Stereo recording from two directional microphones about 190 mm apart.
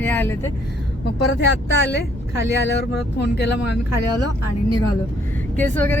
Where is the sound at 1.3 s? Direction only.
65° left (ahead or behind).